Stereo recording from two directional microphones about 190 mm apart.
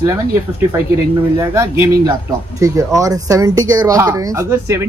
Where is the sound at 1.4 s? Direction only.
15° right (ahead or behind).